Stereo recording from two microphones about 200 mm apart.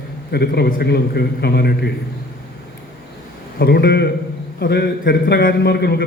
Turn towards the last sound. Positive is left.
turn(degrees=55)  # may be behind; listen again after turning